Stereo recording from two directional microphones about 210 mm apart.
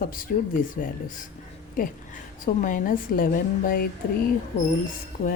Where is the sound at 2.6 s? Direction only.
40° left (ahead or behind).